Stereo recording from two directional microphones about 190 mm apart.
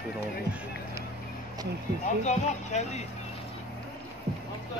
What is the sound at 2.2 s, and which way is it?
Speech, 35° left (ahead or behind).